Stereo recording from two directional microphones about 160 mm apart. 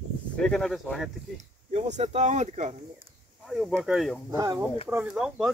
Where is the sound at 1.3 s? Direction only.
45° right (ahead or behind).